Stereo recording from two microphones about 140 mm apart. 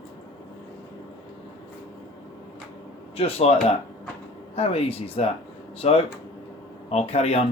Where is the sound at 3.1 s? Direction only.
45° left (ahead or behind).